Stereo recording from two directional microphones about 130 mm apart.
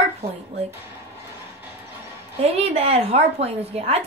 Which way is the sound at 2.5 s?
50° right (ahead or behind).